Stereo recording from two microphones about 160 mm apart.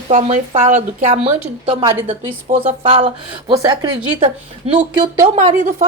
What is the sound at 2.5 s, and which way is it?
Speech, 45° right (ahead or behind).